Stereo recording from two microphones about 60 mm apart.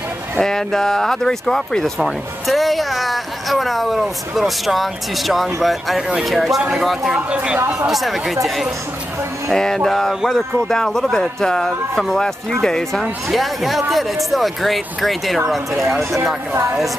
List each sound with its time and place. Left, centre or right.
0.4 s a man's voice: centre
7.2 s speech: right
7.9 s speech: centre
9.5 s a man's voice: centre
13.0 s speech: centre